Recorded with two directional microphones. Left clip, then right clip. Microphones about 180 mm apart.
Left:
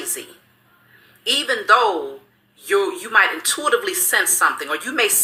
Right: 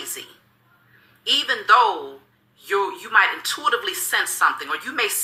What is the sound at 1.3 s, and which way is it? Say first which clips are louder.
A woman's voice: left 1 dB; 15° right (ahead or behind).